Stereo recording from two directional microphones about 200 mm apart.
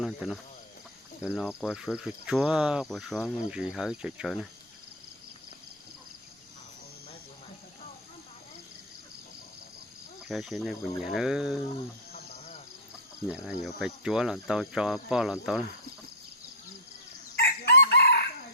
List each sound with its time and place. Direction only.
0.0 s speech: centre (ahead or behind)
1.6 s speech: 5° right (ahead or behind)
10.2 s speech: centre (ahead or behind)
12.1 s insect: 35° left (ahead or behind)
13.2 s speech: 5° right (ahead or behind)
17.3 s crowing: 55° left (ahead or behind)